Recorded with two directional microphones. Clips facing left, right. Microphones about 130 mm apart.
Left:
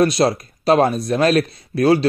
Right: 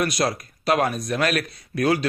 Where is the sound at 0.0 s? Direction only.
25° left (ahead or behind).